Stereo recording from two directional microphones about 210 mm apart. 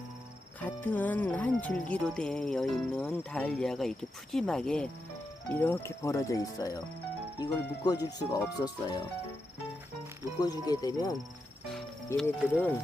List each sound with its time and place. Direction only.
0.6 s speech: 10° left (ahead or behind)
10.4 s speech: 20° left (ahead or behind)
12.1 s speech: 5° left (ahead or behind)